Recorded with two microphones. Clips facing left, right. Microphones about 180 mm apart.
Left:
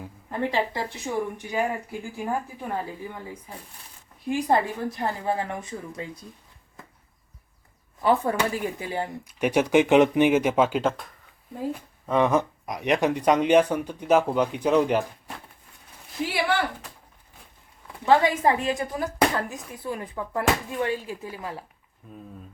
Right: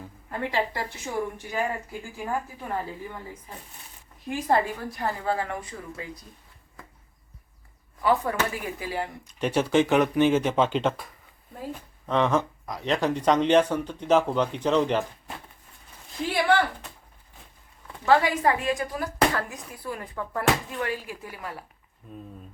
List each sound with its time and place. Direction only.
0.0 s speech: 20° left (ahead or behind)
4.3 s speech: 15° left (ahead or behind)
8.0 s speech: 30° left (ahead or behind)
9.2 s speech: 15° left (ahead or behind)
16.2 s a sound: 10° left (ahead or behind)
18.0 s speech: 20° left (ahead or behind)